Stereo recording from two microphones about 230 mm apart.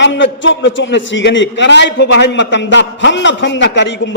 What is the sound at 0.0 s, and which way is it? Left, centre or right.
A man's voice, left.